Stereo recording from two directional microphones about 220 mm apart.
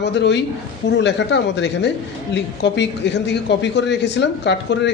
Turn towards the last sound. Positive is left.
turn(degrees=50)  # may be behind; listen again after turning